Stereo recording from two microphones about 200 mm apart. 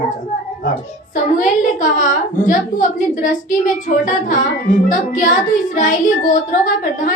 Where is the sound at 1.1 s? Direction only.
40° left (ahead or behind).